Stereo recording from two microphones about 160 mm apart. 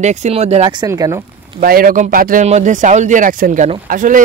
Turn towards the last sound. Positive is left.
turn(degrees=-55)  # may be behind; listen again after turning